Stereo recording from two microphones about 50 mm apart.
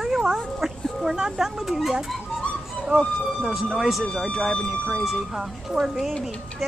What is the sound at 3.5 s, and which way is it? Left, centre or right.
Speech, centre.